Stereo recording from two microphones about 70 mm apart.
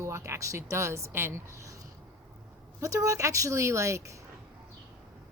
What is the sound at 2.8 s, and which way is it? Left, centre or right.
Speech, right.